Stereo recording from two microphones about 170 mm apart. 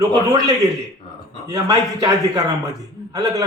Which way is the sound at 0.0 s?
20° right (ahead or behind).